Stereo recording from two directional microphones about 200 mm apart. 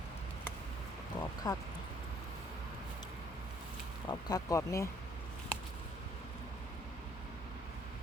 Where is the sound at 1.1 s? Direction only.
20° left (ahead or behind).